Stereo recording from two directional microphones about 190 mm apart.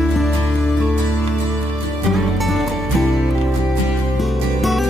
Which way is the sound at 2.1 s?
Centre (ahead or behind).